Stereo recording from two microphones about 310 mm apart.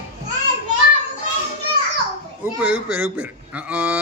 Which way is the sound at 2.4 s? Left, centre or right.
Centre.